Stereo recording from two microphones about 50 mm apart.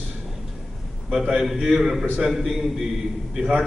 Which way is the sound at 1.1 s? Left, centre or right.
Centre.